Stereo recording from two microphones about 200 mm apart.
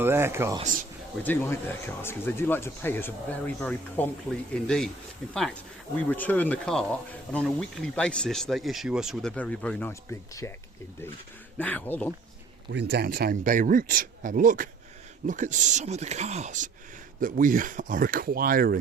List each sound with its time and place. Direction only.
0.0 s speech: 10° right (ahead or behind)
0.6 s speech: 40° right (ahead or behind)
1.2 s speech: 10° left (ahead or behind)
11.5 s speech: 10° left (ahead or behind)
12.7 s speech: 55° right (ahead or behind)